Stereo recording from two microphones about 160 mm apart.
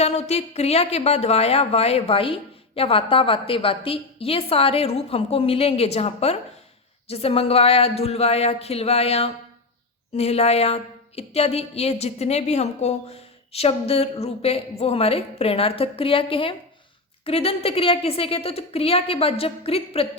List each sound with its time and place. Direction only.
0.0 s a woman's voice: 40° left (ahead or behind)